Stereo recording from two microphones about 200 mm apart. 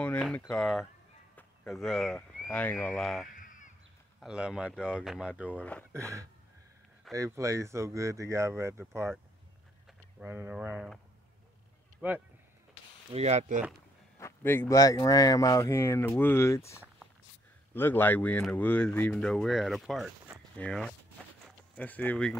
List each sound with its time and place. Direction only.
0.0 s a sound: 5° left (ahead or behind)
0.5 s speech: centre (ahead or behind)
1.3 s a sound: 5° left (ahead or behind)
2.4 s speech: 10° left (ahead or behind)
3.3 s crow: 40° left (ahead or behind)
4.2 s speech: 5° right (ahead or behind)
5.9 s speech: 15° right (ahead or behind)
10.2 s speech: 10° right (ahead or behind)
12.0 s speech: 10° right (ahead or behind)
13.1 s speech: 35° right (ahead or behind)
14.1 s speech: 10° left (ahead or behind)